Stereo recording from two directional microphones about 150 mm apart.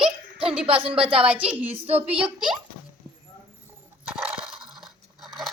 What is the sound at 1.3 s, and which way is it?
Speech, 10° right (ahead or behind).